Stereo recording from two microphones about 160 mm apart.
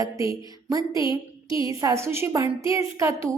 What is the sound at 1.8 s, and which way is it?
A woman's voice, 15° right (ahead or behind).